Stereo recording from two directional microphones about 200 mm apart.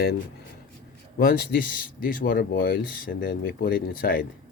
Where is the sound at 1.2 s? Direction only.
45° left (ahead or behind).